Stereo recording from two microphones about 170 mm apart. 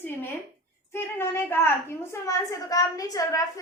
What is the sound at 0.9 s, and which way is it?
A woman's voice, 15° left (ahead or behind).